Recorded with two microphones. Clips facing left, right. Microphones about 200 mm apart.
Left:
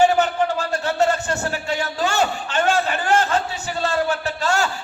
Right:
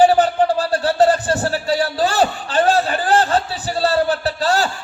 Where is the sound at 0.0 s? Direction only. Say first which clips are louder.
Right 4 dB; 35° right (ahead or behind).